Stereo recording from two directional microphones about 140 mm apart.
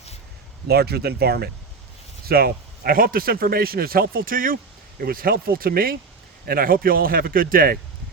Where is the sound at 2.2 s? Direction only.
90° right.